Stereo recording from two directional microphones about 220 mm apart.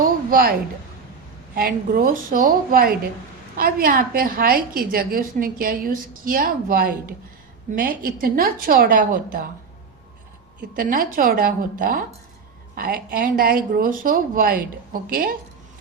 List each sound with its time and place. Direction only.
0.0 s a sound: 40° right (ahead or behind)
1.5 s a woman's voice: 40° right (ahead or behind)
10.8 s a woman's voice: 40° right (ahead or behind)